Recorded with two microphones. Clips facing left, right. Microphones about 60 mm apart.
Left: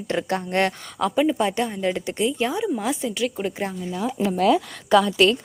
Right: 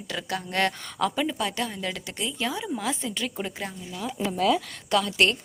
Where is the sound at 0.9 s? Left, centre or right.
Centre.